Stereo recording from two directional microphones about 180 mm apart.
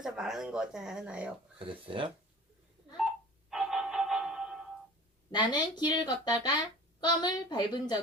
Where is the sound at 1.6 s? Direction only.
30° right (ahead or behind).